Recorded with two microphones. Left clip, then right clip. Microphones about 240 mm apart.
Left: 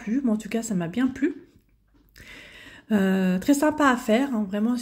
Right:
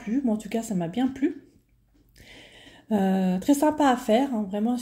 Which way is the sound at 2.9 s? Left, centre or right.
Left.